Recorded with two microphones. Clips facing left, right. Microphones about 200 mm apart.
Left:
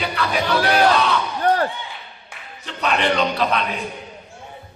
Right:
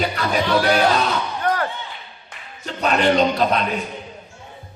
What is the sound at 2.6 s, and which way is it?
Speech, 40° right (ahead or behind).